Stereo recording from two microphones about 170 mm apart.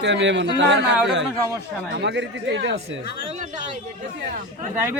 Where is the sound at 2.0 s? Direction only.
90° right.